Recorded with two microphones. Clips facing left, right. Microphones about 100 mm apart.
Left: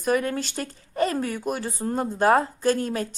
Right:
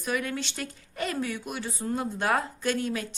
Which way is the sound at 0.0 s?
40° left (ahead or behind).